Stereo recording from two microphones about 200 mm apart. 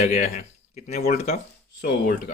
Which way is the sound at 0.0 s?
35° left (ahead or behind).